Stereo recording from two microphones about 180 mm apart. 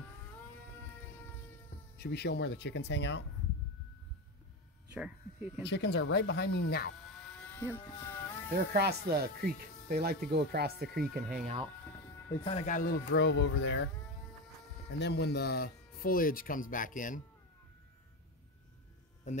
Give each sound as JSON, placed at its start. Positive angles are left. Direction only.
{"t": 2.0, "sound": "speech", "side_deg": 65}
{"t": 4.9, "sound": "speech", "side_deg": -5}
{"t": 5.6, "sound": "speech", "side_deg": 70}
{"t": 7.3, "sound": "speech", "side_deg": 10}
{"t": 8.7, "sound": "speech", "side_deg": -65}
{"t": 12.6, "sound": "speech", "side_deg": 50}
{"t": 14.9, "sound": "speech", "side_deg": 70}
{"t": 19.3, "sound": "speech", "side_deg": 40}